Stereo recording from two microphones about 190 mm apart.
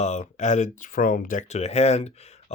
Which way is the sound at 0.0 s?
40° left (ahead or behind).